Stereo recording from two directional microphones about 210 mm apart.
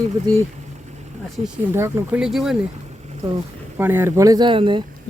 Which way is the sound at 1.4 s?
30° right (ahead or behind).